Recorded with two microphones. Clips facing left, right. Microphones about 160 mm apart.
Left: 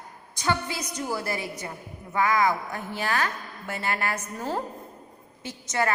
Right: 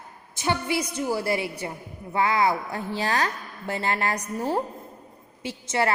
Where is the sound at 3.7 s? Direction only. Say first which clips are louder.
Right 3 dB; 25° right (ahead or behind).